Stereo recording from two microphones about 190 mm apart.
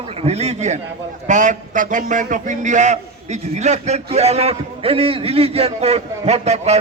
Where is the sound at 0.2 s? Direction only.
35° right (ahead or behind).